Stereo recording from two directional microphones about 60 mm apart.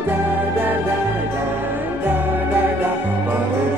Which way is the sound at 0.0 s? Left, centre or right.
Right.